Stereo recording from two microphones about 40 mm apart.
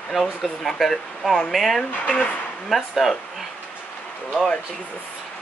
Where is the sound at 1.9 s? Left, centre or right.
Left.